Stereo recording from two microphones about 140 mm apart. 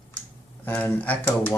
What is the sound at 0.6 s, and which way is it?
Speech, 15° left (ahead or behind).